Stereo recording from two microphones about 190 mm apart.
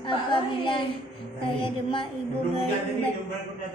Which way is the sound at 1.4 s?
30° left (ahead or behind).